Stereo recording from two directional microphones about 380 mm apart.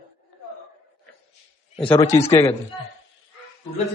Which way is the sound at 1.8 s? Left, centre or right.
Centre.